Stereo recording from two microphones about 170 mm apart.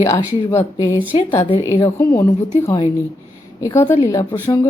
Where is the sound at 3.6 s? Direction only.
25° left (ahead or behind).